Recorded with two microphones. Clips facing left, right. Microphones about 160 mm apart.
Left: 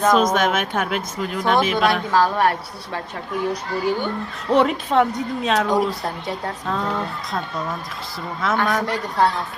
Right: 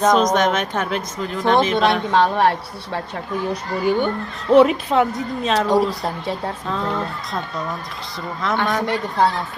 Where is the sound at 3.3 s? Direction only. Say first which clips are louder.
Even; centre (ahead or behind).